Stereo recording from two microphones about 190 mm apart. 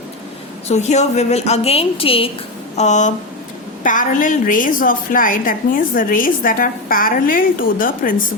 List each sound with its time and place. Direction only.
0.7 s a woman's voice: 35° left (ahead or behind)